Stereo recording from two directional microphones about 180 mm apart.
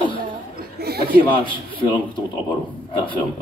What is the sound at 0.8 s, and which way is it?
Chuckle, 60° right (ahead or behind).